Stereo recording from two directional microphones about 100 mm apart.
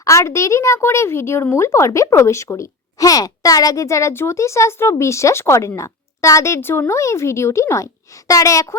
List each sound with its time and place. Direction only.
0.0 s a woman's voice: 30° left (ahead or behind)